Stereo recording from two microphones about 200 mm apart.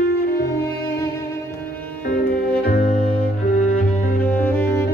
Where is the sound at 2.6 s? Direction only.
45° left (ahead or behind).